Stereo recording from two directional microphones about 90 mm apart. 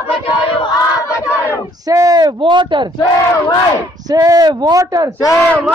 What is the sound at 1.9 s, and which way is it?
Speech, 40° right (ahead or behind).